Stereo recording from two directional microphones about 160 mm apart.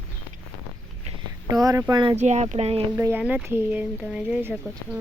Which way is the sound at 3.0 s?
15° right (ahead or behind).